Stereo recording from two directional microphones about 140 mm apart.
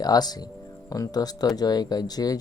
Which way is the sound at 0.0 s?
30° left (ahead or behind).